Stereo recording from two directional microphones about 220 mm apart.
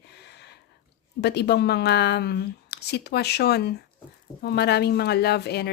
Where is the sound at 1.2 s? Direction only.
50° left (ahead or behind).